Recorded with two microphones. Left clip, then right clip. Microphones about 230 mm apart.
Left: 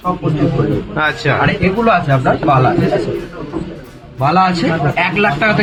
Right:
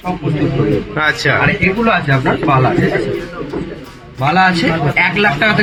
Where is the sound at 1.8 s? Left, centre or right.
Centre.